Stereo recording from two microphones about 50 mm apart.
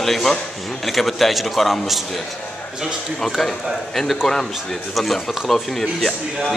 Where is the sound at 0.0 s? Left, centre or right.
Centre.